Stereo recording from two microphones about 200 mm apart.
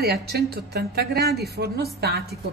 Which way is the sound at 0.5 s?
50° right (ahead or behind).